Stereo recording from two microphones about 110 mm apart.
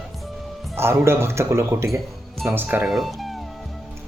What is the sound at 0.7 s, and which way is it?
Speech, 25° right (ahead or behind).